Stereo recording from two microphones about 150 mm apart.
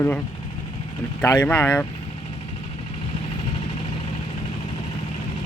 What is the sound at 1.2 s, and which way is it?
Speech, 15° left (ahead or behind).